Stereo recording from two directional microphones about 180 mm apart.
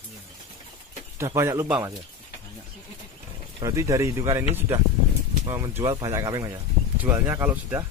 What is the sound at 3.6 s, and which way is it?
Speech, 15° right (ahead or behind).